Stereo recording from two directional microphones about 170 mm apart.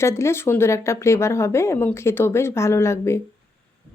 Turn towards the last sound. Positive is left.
turn(degrees=15)  # may be behind; listen again after turning